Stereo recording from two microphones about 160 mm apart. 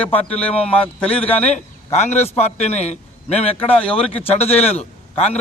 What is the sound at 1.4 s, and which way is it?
A man's voice, 45° left (ahead or behind).